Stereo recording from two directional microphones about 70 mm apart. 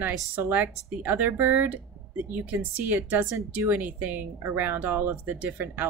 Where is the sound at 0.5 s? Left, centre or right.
Right.